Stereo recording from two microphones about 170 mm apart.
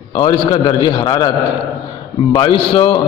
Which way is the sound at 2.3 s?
30° left (ahead or behind).